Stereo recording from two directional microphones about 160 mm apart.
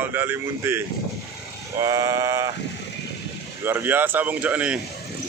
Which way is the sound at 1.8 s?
20° right (ahead or behind).